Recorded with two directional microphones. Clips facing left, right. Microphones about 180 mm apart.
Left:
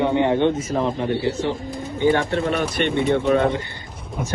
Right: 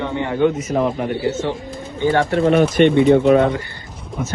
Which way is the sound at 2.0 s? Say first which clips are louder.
Right 1 dB; 15° left (ahead or behind).